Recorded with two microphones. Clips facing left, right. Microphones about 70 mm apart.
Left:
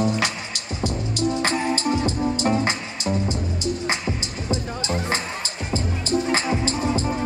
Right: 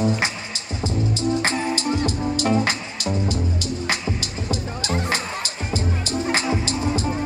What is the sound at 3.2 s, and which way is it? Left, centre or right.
Music, left.